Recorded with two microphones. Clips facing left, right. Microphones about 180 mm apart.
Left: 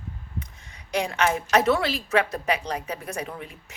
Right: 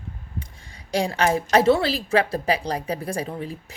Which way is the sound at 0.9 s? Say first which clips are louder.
Right 3 dB; 35° right (ahead or behind).